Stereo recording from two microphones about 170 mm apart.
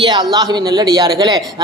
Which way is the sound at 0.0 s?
25° right (ahead or behind).